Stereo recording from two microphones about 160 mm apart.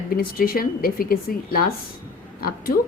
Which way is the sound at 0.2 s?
65° left (ahead or behind).